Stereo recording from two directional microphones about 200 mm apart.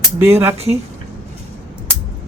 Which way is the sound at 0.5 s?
30° right (ahead or behind).